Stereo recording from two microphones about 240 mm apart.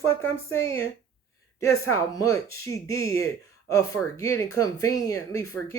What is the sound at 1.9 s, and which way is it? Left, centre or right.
Speech, centre.